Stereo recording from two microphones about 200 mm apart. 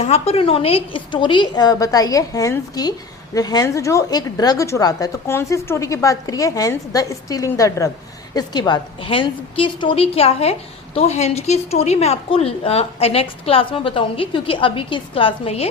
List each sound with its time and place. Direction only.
0.0 s a woman's voice: 30° left (ahead or behind)